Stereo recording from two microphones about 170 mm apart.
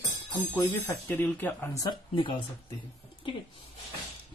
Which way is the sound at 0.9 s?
10° left (ahead or behind).